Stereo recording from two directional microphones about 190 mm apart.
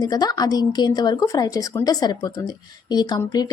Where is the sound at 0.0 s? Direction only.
20° left (ahead or behind).